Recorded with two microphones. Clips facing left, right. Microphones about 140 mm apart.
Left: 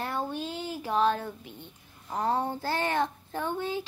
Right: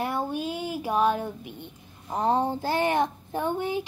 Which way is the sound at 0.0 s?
15° right (ahead or behind).